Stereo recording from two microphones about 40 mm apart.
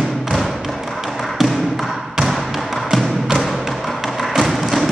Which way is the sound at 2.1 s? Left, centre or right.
Centre.